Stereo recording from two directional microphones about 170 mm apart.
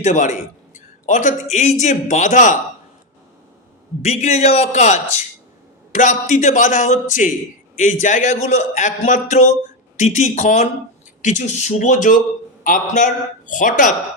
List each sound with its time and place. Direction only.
0.0 s a man's voice: 45° left (ahead or behind)
4.0 s a man's voice: 40° left (ahead or behind)